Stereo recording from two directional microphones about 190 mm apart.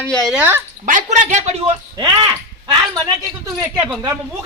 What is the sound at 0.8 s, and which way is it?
Speech, 40° right (ahead or behind).